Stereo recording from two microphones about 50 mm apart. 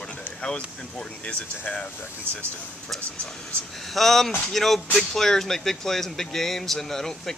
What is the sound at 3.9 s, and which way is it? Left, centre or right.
Speech, centre.